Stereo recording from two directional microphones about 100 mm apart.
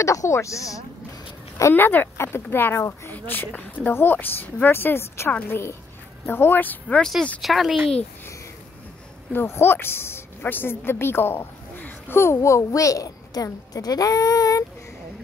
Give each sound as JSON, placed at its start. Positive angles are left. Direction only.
{"t": 0.0, "sound": "speech", "side_deg": 30}
{"t": 1.6, "sound": "speech", "side_deg": 20}
{"t": 7.4, "sound": "speech", "side_deg": 0}
{"t": 9.3, "sound": "a woman's voice", "side_deg": 25}